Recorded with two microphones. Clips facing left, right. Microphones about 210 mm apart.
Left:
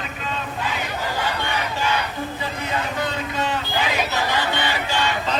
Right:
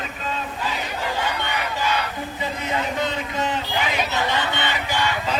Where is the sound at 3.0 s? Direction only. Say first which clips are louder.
Even; 20° right (ahead or behind).